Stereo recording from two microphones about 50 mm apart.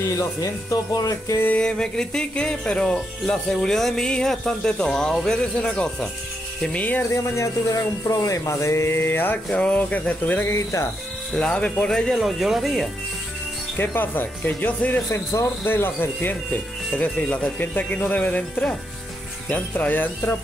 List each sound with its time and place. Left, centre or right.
1.6 s speech: centre
6.7 s speech: left
7.1 s speech: left
8.9 s speech: left
9.5 s speech: left
10.5 s speech: left
11.3 s speech: left
12.1 s speech: centre
13.7 s speech: left
15.1 s speech: left
15.6 s speech: left
17.0 s speech: left